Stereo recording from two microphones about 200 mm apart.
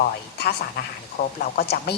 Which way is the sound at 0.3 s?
55° left (ahead or behind).